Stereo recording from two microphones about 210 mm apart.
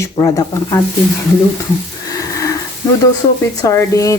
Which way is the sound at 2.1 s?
15° left (ahead or behind).